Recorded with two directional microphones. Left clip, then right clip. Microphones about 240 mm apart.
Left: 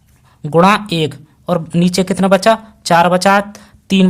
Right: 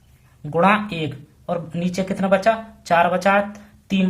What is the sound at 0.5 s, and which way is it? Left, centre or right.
Speech, left.